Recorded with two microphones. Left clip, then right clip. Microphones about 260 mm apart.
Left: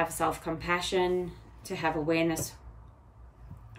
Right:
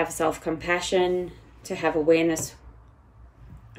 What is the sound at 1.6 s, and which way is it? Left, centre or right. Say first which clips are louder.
Speech: right 7 dB; right.